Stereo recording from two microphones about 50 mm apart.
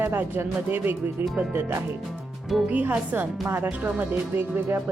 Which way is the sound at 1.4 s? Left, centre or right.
Right.